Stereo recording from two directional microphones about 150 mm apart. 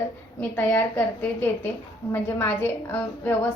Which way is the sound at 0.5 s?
15° left (ahead or behind).